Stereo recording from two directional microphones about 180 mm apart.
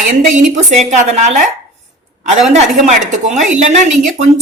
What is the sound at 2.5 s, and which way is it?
A woman's voice, 40° right (ahead or behind).